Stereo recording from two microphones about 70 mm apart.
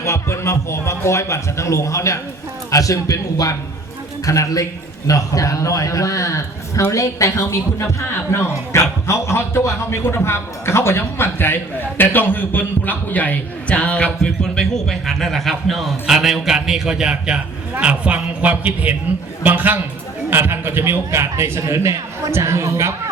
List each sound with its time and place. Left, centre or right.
0.0 s a man's voice: left; by 23.0 s right